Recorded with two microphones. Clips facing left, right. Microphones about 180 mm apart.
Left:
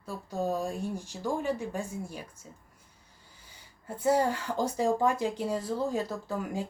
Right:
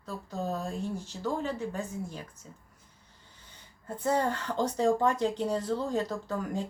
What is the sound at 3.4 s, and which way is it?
Speech, 10° left (ahead or behind).